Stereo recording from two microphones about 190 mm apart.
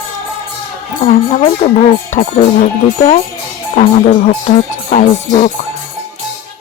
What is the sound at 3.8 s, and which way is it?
Music, 35° left (ahead or behind).